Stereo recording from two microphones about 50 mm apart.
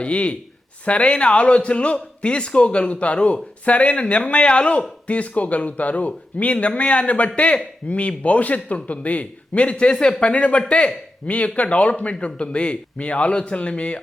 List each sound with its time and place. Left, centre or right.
0.0 s speech: left